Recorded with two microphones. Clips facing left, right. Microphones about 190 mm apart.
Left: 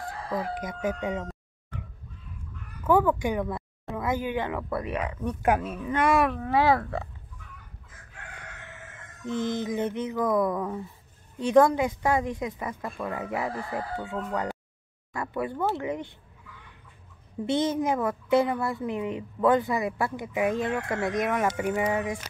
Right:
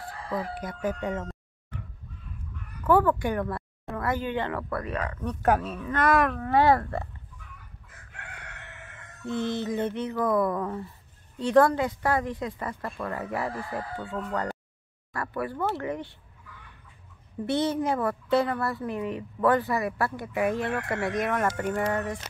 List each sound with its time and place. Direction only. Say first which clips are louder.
0.3 s a woman's voice: left 1 dB; 15° left (ahead or behind)
2.8 s a woman's voice: even; 10° left (ahead or behind)
9.4 s a woman's voice: even; 15° left (ahead or behind)
17.6 s a woman's voice: even; 15° left (ahead or behind)
21.2 s a woman's voice: left 1 dB; centre (ahead or behind)